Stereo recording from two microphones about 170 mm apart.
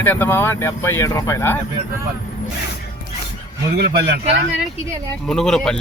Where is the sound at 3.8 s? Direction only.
70° right (ahead or behind).